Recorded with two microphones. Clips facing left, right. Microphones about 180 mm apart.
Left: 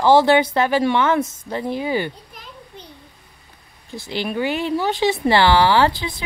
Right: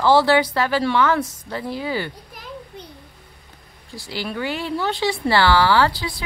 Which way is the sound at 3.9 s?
20° left (ahead or behind).